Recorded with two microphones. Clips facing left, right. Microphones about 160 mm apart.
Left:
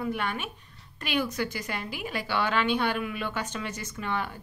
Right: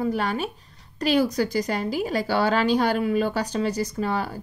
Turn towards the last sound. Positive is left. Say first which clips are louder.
# right 6 dB
turn(degrees=-35)  # may be behind; listen again after turning